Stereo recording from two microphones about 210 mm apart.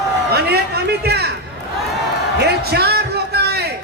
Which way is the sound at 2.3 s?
50° right (ahead or behind).